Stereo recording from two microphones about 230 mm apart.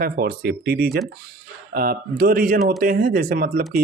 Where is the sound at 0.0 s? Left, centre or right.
Right.